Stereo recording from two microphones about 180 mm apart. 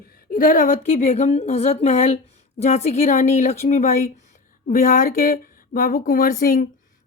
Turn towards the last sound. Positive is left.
turn(degrees=55)  # may be behind; listen again after turning